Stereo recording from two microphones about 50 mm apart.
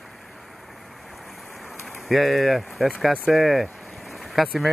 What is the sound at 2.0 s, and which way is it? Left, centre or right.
Speech, centre.